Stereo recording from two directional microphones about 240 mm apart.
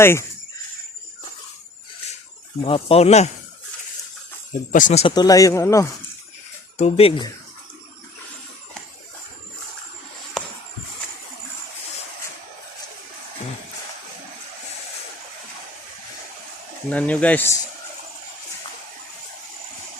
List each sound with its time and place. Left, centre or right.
0.0 s speech: centre
2.6 s speech: left
4.7 s speech: left; by 5.9 s centre
6.7 s speech: left
10.4 s a sound: centre
16.9 s speech: centre